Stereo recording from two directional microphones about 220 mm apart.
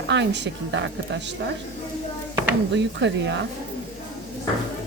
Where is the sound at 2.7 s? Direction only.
55° right (ahead or behind).